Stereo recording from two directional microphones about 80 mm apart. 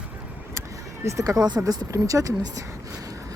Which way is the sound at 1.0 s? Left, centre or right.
Right.